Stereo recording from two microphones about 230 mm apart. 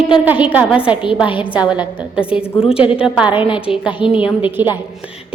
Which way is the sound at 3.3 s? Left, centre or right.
Left.